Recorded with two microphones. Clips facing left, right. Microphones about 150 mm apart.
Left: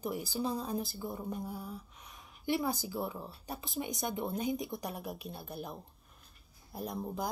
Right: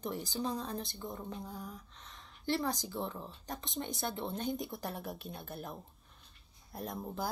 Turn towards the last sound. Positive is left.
turn(degrees=0)  # may be behind; listen again after turning